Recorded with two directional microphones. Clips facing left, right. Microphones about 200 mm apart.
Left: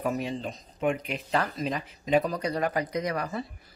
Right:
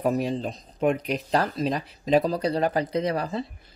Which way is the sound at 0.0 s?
35° right (ahead or behind).